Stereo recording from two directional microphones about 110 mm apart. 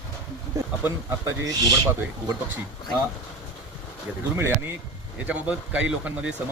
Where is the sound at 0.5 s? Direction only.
30° right (ahead or behind).